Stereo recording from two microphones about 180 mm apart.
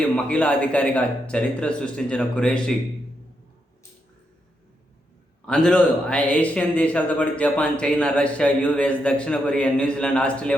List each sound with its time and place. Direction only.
0.0 s a man's voice: 5° left (ahead or behind)
5.5 s a man's voice: 5° left (ahead or behind)